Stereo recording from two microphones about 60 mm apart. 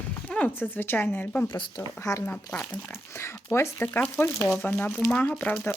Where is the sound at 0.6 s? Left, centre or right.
Left.